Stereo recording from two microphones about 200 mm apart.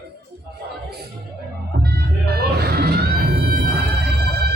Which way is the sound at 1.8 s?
55° right (ahead or behind).